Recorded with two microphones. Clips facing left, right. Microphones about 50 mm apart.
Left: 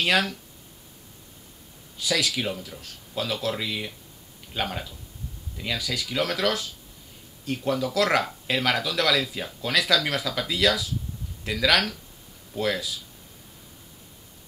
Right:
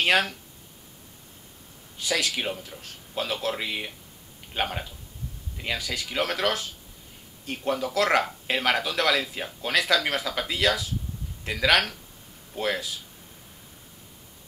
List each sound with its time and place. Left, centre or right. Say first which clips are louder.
0.0 s speech: right 1 dB; centre
2.0 s speech: left 1 dB; centre